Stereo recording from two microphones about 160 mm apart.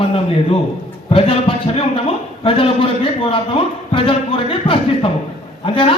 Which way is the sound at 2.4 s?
35° left (ahead or behind).